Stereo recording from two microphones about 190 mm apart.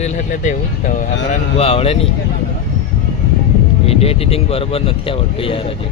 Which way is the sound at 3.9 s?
30° left (ahead or behind).